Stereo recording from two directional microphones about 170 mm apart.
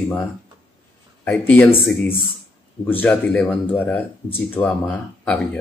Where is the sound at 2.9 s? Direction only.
10° left (ahead or behind).